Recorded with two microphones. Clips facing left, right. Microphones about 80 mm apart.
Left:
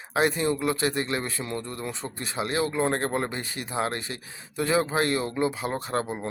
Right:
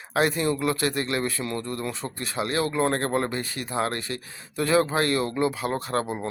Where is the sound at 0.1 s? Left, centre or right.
Left.